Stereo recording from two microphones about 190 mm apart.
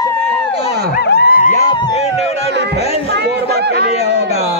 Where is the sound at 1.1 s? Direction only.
55° left (ahead or behind).